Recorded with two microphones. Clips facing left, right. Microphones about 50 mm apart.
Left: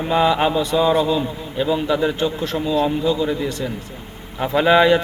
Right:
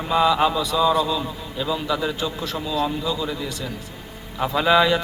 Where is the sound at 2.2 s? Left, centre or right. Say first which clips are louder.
Left 5 dB; left.